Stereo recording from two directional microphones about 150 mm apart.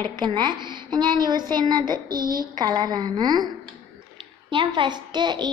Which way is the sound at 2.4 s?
30° right (ahead or behind).